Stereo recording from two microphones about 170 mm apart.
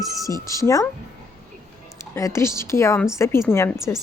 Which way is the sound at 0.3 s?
20° left (ahead or behind).